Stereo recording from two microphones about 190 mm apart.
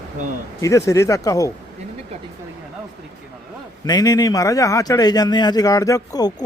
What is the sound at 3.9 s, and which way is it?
Speech, 20° left (ahead or behind).